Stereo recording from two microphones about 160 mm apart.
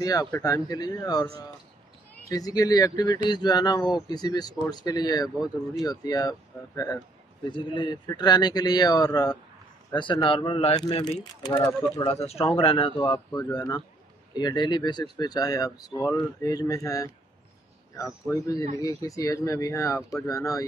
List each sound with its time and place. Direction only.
0.0 s speech: 20° left (ahead or behind)
10.8 s speech: 25° left (ahead or behind)
12.1 s speech: 40° left (ahead or behind); by 17.1 s 20° left (ahead or behind)
18.3 s speech: 20° left (ahead or behind)
20.0 s speech: centre (ahead or behind)
20.2 s speech: 20° left (ahead or behind)